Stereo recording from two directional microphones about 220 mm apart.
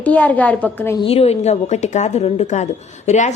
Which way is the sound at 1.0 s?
30° left (ahead or behind).